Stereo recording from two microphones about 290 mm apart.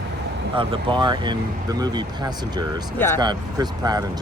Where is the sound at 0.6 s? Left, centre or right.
Centre.